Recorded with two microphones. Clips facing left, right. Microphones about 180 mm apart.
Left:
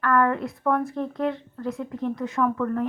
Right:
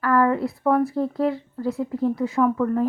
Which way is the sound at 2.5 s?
20° right (ahead or behind).